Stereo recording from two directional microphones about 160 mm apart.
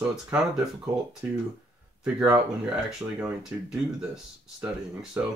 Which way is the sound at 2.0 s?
5° right (ahead or behind).